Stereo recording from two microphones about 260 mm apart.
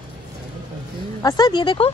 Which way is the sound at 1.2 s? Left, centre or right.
Centre.